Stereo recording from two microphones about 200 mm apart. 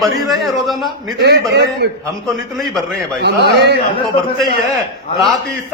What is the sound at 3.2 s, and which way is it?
Speech, 55° right (ahead or behind).